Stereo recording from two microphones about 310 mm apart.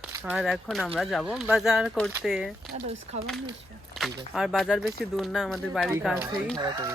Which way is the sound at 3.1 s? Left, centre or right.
Centre.